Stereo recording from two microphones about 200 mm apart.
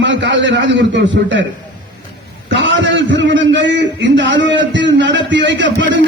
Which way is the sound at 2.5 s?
70° right (ahead or behind).